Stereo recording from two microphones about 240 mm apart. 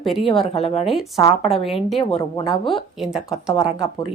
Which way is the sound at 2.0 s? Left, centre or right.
Left.